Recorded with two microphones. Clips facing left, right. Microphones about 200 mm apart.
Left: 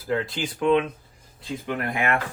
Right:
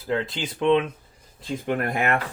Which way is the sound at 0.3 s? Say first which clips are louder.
Right 1 dB; 25° right (ahead or behind).